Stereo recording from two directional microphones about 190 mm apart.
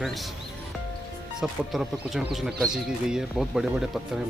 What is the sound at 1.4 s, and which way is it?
Speech, centre (ahead or behind).